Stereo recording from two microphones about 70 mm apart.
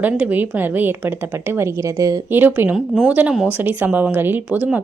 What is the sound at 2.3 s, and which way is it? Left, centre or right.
Speech, right.